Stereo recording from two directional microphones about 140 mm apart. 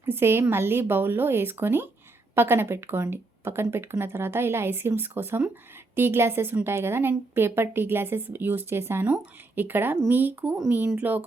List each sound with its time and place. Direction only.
0.0 s a woman's voice: 15° right (ahead or behind)